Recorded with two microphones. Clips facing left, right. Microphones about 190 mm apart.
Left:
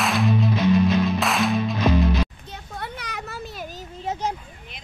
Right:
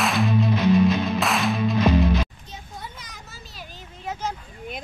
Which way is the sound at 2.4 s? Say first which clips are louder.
Left 4 dB; 60° left (ahead or behind).